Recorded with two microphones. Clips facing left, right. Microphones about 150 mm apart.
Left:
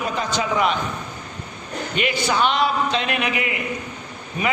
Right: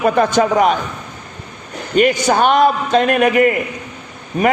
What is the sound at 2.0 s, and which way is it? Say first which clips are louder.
A man's voice: right 8 dB; 45° right (ahead or behind).